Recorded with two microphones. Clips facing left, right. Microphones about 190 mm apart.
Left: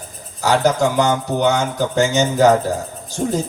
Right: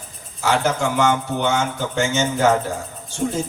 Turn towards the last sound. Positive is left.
turn(degrees=35)  # may be behind; listen again after turning